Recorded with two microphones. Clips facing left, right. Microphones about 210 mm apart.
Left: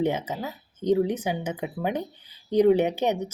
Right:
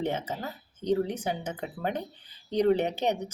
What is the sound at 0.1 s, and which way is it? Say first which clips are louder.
Speech: left 3 dB; 15° left (ahead or behind).